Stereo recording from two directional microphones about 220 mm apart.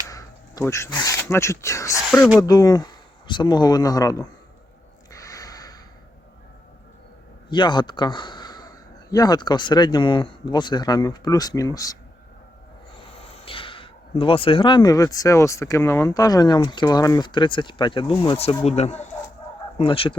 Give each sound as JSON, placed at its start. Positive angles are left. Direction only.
{"t": 0.1, "sound": "speech", "side_deg": 15}
{"t": 2.0, "sound": "speech", "side_deg": 0}
{"t": 2.4, "sound": "speech", "side_deg": 15}
{"t": 5.1, "sound": "snort", "side_deg": 15}
{"t": 7.5, "sound": "a man's voice", "side_deg": 20}
{"t": 13.1, "sound": "speech", "side_deg": 25}